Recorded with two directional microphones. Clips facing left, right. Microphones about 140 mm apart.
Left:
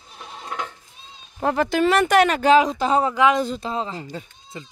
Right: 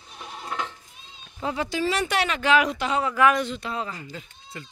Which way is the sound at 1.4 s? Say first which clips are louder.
Left 7 dB; 55° left (ahead or behind).